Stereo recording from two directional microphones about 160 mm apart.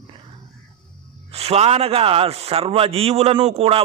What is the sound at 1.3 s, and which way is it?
A man's voice, 40° right (ahead or behind).